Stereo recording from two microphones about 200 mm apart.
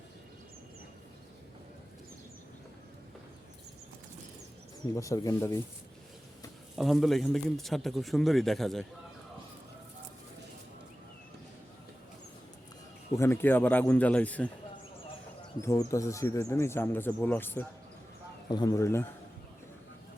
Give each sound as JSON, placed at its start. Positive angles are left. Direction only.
{"t": 4.9, "sound": "speech", "side_deg": 15}
{"t": 6.7, "sound": "a man's voice", "side_deg": 0}
{"t": 13.1, "sound": "speech", "side_deg": 10}
{"t": 15.6, "sound": "speech", "side_deg": 15}